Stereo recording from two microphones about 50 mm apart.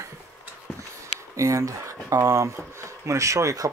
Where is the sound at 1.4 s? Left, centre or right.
Right.